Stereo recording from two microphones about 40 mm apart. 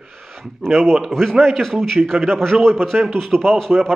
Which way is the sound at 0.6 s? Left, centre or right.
Centre.